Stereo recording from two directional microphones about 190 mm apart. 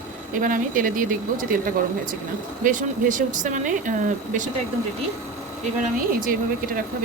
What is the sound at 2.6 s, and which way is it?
Speech, 45° right (ahead or behind).